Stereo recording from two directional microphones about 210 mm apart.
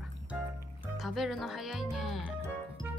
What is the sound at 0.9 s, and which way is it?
Music, centre (ahead or behind).